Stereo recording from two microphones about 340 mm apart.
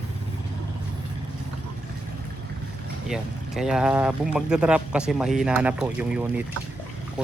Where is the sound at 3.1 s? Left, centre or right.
Centre.